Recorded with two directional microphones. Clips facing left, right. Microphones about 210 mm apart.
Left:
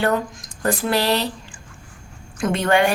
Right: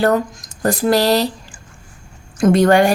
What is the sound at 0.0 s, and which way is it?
Speech, 40° right (ahead or behind).